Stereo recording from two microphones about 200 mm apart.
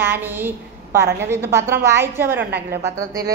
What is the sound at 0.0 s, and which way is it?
A woman's voice, 10° right (ahead or behind).